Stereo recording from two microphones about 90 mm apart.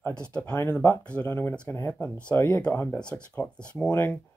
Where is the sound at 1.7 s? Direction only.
30° left (ahead or behind).